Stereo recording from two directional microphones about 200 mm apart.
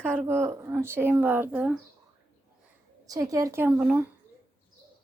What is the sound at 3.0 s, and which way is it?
Speech, 15° right (ahead or behind).